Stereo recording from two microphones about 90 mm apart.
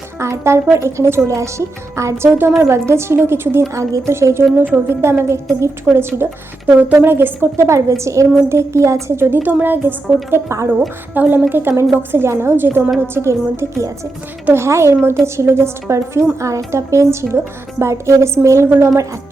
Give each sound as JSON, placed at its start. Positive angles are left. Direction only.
{"t": 0.2, "sound": "a woman's voice", "side_deg": -30}
{"t": 10.7, "sound": "a woman's voice", "side_deg": -20}